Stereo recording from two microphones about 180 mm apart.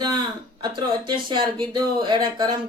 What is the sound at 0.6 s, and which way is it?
Speech, 25° right (ahead or behind).